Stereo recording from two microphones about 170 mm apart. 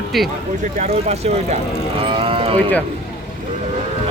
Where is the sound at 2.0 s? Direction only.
30° right (ahead or behind).